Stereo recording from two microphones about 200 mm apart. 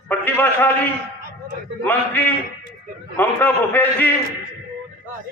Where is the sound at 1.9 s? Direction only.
10° left (ahead or behind).